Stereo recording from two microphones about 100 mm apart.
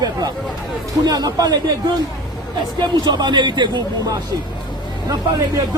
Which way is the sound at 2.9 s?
45° right (ahead or behind).